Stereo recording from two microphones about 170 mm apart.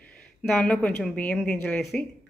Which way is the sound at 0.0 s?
5° left (ahead or behind).